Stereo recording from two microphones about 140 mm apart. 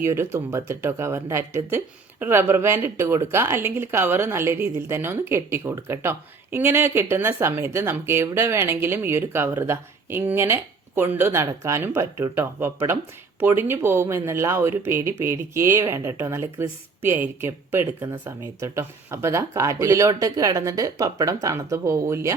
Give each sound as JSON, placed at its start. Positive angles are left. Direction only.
{"t": 0.0, "sound": "speech", "side_deg": -20}